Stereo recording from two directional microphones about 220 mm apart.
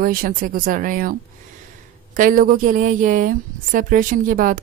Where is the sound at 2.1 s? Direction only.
40° right (ahead or behind).